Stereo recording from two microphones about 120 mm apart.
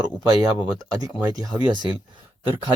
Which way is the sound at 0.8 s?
30° right (ahead or behind).